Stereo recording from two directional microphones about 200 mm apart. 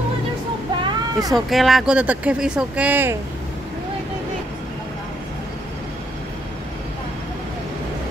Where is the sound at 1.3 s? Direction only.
Centre (ahead or behind).